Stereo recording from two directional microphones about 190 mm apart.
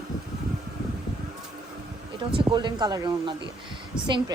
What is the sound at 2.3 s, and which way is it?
Speech, 25° right (ahead or behind).